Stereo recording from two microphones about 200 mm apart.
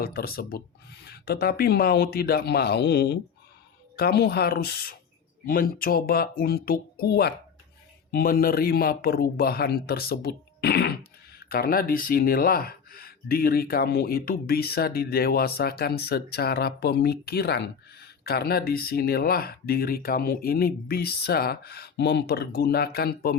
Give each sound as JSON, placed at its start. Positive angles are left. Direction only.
{"t": 0.0, "sound": "speech", "side_deg": 50}